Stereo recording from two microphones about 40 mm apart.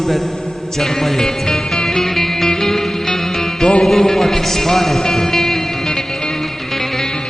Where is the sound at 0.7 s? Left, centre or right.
Centre.